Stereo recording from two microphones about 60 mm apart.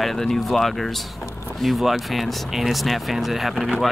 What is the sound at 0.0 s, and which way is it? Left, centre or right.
Speech, centre.